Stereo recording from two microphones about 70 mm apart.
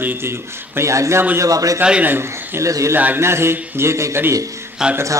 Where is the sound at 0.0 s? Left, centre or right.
Right.